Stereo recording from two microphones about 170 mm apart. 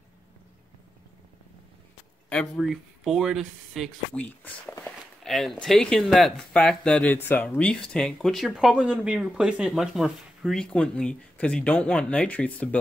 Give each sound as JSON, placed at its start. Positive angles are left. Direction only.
{"t": 2.2, "sound": "speech", "side_deg": 5}